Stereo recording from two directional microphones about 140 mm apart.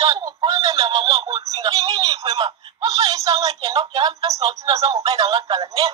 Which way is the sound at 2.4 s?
25° right (ahead or behind).